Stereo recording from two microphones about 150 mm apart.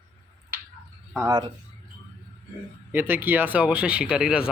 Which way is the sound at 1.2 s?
30° right (ahead or behind).